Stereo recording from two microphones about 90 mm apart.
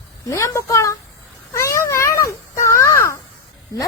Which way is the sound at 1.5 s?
30° left (ahead or behind).